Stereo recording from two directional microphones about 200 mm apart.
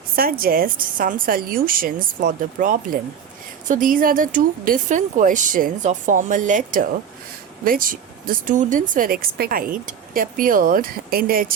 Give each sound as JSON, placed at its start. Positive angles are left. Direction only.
{"t": 0.2, "sound": "a woman's voice", "side_deg": -45}